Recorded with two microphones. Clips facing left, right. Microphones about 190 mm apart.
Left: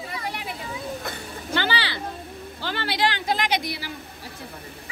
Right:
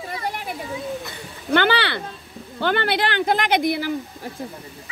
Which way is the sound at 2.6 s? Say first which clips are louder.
Right 5 dB; 55° right (ahead or behind).